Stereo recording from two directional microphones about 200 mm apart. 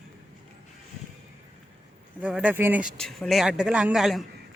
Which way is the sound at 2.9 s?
Centre (ahead or behind).